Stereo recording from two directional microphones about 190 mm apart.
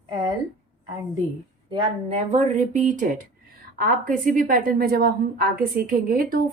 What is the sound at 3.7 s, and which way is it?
A woman's voice, 50° right (ahead or behind).